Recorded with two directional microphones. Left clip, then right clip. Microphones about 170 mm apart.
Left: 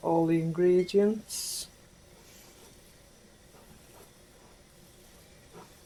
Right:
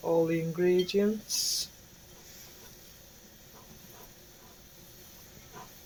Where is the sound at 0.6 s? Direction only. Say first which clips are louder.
Left 2 dB; 25° left (ahead or behind).